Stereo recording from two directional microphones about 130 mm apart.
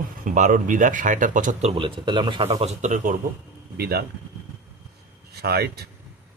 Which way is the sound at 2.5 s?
55° right (ahead or behind).